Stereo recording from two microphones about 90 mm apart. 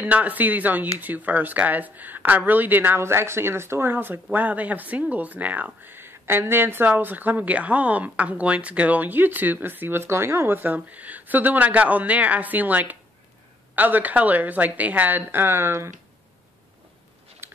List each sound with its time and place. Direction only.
0.0 s speech: 20° right (ahead or behind)
17.4 s biting: 30° right (ahead or behind)